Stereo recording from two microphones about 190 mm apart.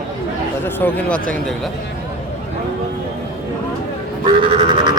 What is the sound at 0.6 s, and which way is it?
Speech, 10° left (ahead or behind).